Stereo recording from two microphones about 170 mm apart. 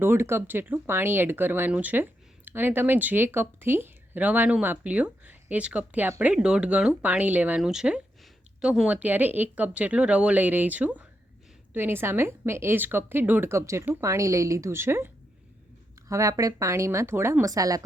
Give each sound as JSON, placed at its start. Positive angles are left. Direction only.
{"t": 0.0, "sound": "speech", "side_deg": -15}